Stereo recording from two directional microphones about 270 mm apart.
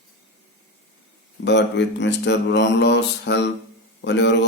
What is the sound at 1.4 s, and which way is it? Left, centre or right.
Mantra, left.